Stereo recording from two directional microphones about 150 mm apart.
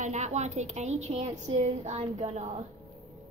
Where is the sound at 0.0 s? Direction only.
50° right (ahead or behind).